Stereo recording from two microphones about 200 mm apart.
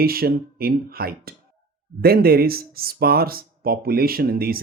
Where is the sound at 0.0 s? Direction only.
50° right (ahead or behind).